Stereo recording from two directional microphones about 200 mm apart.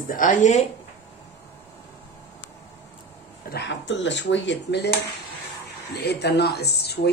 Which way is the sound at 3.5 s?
60° left (ahead or behind).